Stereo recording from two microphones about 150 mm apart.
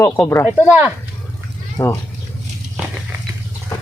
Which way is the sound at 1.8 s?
20° left (ahead or behind).